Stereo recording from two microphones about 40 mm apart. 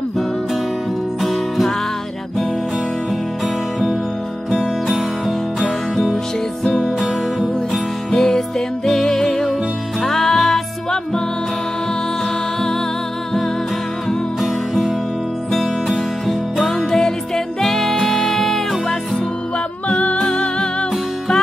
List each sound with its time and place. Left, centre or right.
1.2 s music: centre
4.8 s music: centre
8.1 s music: centre
14.4 s music: centre
15.9 s music: centre
20.2 s music: centre